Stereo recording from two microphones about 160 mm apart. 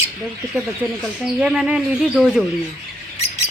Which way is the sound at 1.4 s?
5° right (ahead or behind).